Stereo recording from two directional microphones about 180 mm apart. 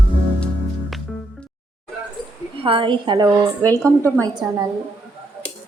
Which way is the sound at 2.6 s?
30° right (ahead or behind).